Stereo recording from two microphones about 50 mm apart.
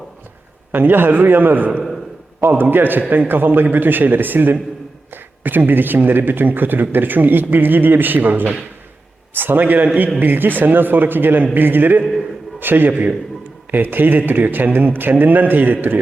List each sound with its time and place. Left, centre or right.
0.7 s a man's voice: right